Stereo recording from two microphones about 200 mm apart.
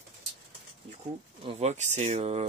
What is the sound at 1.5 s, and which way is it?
Speech, 35° right (ahead or behind).